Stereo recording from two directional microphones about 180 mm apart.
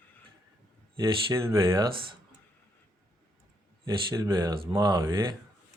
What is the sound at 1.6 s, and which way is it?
Speech, 25° right (ahead or behind).